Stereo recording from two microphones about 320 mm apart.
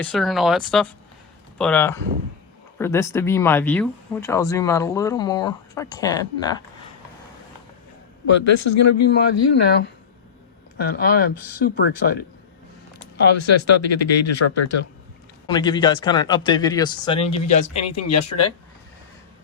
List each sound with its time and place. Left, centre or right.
0.0 s speech: centre
8.3 s speech: left
9.0 s speech: left
13.1 s speech: left
15.4 s speech: centre